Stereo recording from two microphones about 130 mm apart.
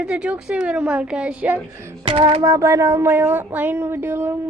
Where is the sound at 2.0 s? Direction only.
45° right (ahead or behind).